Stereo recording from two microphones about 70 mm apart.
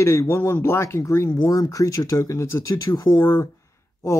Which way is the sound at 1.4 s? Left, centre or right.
Left.